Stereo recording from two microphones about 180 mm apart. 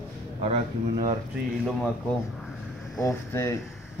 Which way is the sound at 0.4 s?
40° right (ahead or behind).